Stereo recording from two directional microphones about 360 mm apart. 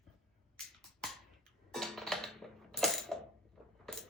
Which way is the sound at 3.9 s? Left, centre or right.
Centre.